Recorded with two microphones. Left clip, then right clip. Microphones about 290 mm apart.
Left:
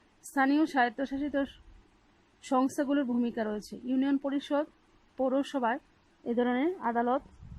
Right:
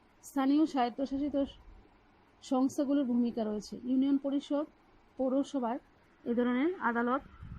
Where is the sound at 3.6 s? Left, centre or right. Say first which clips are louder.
Left 1 dB; left.